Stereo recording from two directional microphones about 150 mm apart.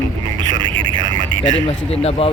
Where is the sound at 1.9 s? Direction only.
45° left (ahead or behind).